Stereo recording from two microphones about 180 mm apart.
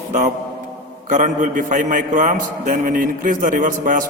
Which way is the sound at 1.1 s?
45° right (ahead or behind).